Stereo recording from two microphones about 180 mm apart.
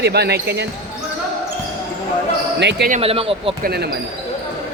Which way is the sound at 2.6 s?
75° right (ahead or behind).